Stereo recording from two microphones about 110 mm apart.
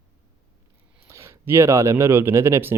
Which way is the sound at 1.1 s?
25° right (ahead or behind).